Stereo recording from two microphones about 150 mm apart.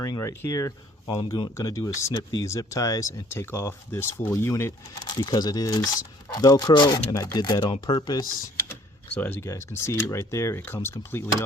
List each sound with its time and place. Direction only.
0.0 s speech: 20° left (ahead or behind)
9.1 s speech: 10° left (ahead or behind)